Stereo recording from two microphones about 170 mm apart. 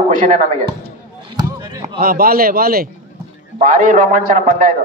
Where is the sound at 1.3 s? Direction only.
25° right (ahead or behind).